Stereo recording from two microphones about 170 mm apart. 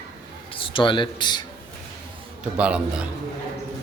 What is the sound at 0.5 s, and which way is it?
Speech, 30° left (ahead or behind).